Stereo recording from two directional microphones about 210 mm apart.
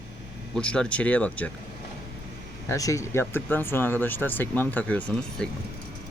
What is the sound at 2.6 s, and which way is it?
Speech, 15° left (ahead or behind).